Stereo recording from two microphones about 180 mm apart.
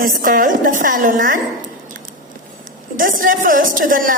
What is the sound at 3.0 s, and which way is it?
Speech, 50° right (ahead or behind).